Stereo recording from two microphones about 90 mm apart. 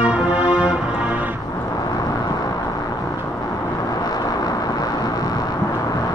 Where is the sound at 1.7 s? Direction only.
45° left (ahead or behind).